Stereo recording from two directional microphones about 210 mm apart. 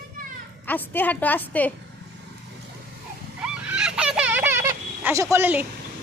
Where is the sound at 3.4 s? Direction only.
5° right (ahead or behind).